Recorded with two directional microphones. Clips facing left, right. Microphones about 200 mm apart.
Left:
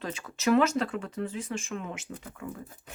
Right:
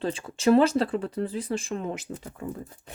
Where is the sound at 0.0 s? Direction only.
30° right (ahead or behind).